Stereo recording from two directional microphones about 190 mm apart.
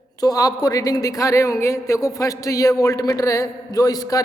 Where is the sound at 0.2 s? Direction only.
20° left (ahead or behind).